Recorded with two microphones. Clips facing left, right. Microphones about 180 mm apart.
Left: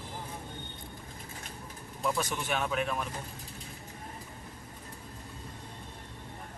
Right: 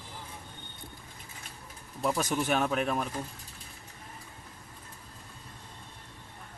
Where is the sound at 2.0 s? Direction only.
40° right (ahead or behind).